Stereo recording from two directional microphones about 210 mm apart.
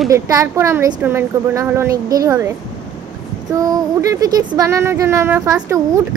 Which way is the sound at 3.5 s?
15° right (ahead or behind).